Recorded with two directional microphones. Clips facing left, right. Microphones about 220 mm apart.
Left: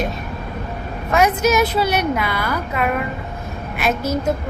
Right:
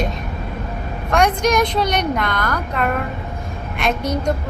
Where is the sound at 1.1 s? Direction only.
5° left (ahead or behind).